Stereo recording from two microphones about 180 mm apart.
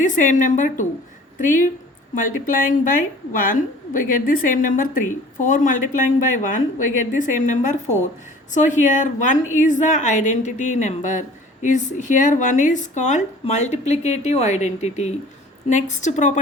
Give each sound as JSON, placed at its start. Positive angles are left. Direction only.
{"t": 0.0, "sound": "a woman's voice", "side_deg": 45}